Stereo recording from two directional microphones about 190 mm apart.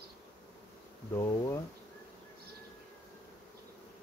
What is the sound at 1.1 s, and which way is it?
Bee, 15° left (ahead or behind).